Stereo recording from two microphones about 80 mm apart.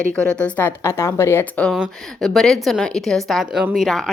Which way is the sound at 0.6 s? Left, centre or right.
Left.